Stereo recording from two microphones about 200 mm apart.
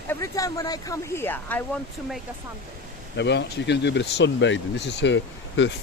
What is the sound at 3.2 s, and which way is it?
Speech, 60° left (ahead or behind).